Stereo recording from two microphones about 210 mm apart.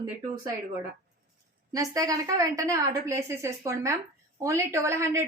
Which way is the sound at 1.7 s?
15° right (ahead or behind).